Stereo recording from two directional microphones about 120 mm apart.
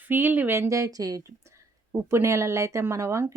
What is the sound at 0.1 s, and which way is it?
A woman's voice, 15° right (ahead or behind).